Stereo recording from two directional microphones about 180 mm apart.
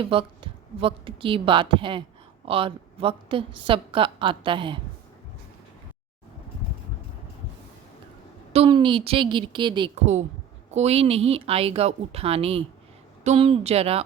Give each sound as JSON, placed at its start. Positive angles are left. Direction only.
{"t": 0.0, "sound": "a woman's voice", "side_deg": -30}
{"t": 8.5, "sound": "a woman's voice", "side_deg": -30}
{"t": 9.9, "sound": "speech", "side_deg": -40}